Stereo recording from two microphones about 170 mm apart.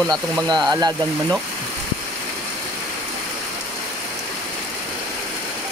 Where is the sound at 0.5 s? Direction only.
25° right (ahead or behind).